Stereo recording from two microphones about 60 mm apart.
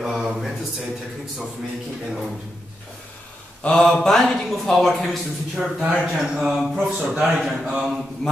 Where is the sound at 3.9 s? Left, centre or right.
Centre.